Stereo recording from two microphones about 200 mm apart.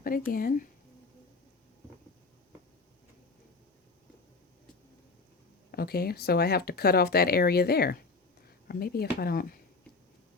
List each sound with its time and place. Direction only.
0.0 s speech: 45° left (ahead or behind)
5.7 s speech: 50° left (ahead or behind)